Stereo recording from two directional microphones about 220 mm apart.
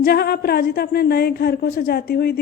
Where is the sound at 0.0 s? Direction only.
45° left (ahead or behind).